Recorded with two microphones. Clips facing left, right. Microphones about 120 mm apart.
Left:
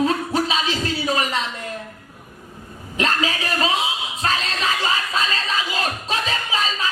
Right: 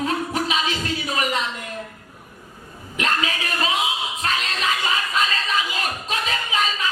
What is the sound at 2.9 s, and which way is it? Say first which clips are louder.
Music: left 2 dB; 30° left (ahead or behind).